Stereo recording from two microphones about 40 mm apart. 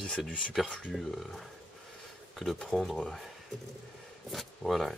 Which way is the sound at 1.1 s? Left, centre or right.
Centre.